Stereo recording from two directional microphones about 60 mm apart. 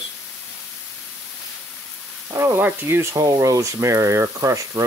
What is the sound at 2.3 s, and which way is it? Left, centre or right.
Speech, right.